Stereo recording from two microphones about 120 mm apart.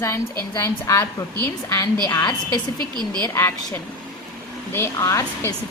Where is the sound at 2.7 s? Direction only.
35° right (ahead or behind).